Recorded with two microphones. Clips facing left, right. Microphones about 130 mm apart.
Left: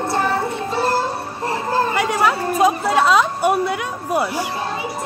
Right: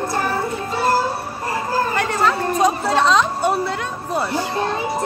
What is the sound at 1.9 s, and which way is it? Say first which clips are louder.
A woman's voice: left 1 dB; 10° left (ahead or behind).